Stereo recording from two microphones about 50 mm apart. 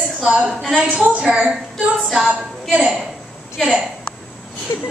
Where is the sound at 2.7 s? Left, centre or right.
Right.